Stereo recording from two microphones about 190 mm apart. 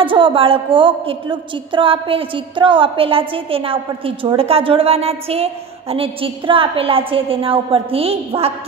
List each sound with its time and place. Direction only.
0.0 s a woman's voice: 25° right (ahead or behind)